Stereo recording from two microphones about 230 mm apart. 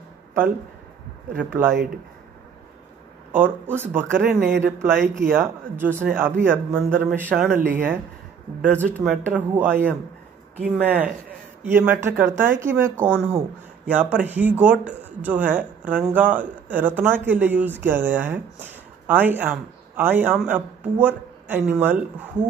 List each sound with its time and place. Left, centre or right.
1.4 s speech: centre
3.3 s speech: centre